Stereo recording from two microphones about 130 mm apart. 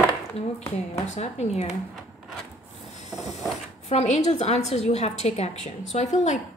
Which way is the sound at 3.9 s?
55° left (ahead or behind).